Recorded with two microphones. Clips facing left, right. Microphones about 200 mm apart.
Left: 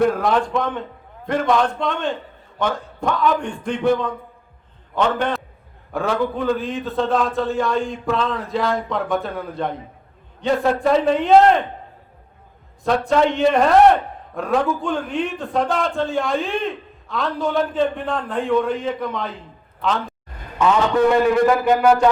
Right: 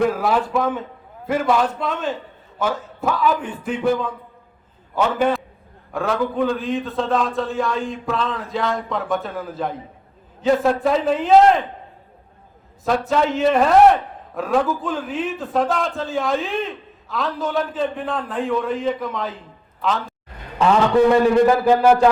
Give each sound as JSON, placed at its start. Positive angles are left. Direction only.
{"t": 0.0, "sound": "a man's voice", "side_deg": -5}
{"t": 12.8, "sound": "a man's voice", "side_deg": -5}
{"t": 21.1, "sound": "a sound", "side_deg": -30}